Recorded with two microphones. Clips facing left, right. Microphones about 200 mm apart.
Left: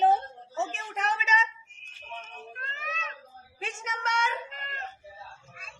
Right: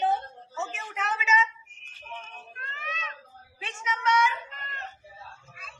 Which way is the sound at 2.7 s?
40° left (ahead or behind).